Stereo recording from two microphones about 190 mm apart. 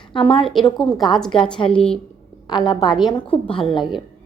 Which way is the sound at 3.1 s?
25° left (ahead or behind).